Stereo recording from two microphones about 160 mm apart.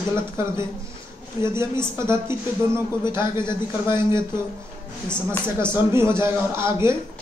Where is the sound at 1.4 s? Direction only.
15° right (ahead or behind).